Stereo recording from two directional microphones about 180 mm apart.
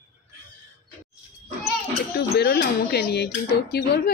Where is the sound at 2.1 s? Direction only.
65° left (ahead or behind).